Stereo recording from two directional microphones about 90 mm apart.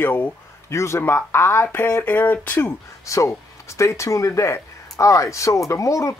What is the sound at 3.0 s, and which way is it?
Speech, 35° left (ahead or behind).